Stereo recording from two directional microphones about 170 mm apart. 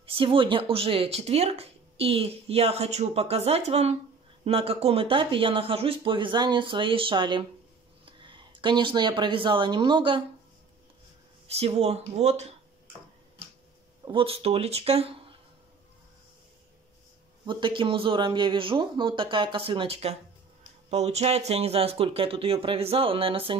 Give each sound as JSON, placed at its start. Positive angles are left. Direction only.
{"t": 0.0, "sound": "speech", "side_deg": -30}
{"t": 11.4, "sound": "speech", "side_deg": -35}
{"t": 14.0, "sound": "speech", "side_deg": -30}
{"t": 17.5, "sound": "speech", "side_deg": -30}